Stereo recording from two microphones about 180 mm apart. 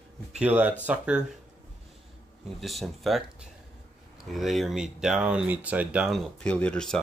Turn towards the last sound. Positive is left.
turn(degrees=5)  # may be behind; listen again after turning